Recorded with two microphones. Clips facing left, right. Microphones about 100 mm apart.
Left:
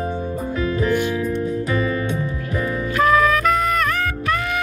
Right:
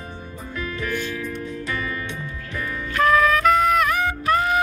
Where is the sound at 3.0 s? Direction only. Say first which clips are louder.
Left 1 dB; centre (ahead or behind).